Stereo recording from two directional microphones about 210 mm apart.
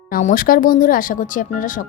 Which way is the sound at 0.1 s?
40° left (ahead or behind).